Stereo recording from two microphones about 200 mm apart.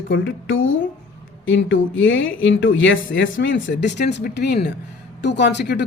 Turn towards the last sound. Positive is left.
turn(degrees=60)  # may be behind; listen again after turning